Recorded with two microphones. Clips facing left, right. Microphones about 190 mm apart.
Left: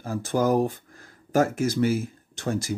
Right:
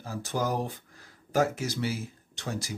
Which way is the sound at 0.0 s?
50° left (ahead or behind).